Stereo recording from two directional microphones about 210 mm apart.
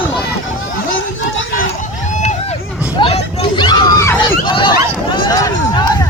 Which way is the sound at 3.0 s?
25° left (ahead or behind).